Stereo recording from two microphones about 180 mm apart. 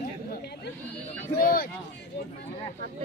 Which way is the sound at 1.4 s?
55° left (ahead or behind).